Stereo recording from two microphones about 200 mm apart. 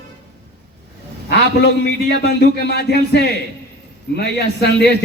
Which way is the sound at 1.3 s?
55° left (ahead or behind).